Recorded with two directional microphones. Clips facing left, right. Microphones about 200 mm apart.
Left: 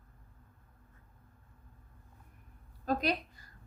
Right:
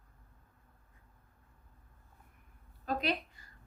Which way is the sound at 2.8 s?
40° left (ahead or behind).